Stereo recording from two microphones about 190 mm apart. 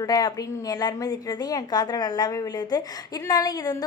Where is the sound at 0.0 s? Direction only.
20° left (ahead or behind).